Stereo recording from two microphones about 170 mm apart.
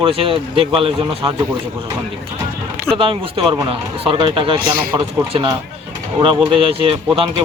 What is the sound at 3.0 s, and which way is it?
A man's voice, 30° right (ahead or behind).